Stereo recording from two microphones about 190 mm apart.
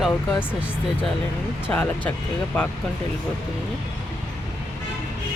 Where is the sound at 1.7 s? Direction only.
5° left (ahead or behind).